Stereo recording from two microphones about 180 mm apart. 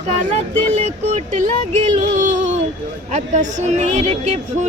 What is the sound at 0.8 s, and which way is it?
Speech, 40° right (ahead or behind).